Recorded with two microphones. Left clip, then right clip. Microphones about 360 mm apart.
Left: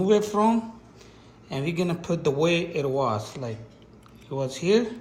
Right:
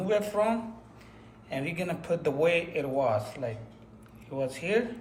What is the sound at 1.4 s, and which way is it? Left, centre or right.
A man's voice, centre.